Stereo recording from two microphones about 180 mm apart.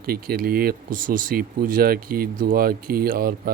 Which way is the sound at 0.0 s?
55° right (ahead or behind).